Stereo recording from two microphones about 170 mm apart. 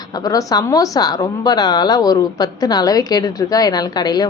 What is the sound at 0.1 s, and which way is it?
A woman's voice, 20° left (ahead or behind).